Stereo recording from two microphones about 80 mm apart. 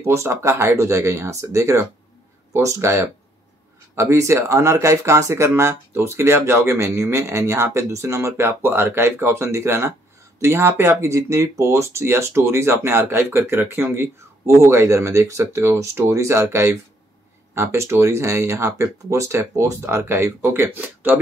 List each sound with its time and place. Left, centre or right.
0.0 s speech: right